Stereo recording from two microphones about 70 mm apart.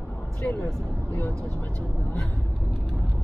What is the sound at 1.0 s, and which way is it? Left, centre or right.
Speech, left.